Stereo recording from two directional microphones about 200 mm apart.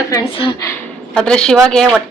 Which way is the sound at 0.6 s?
10° left (ahead or behind).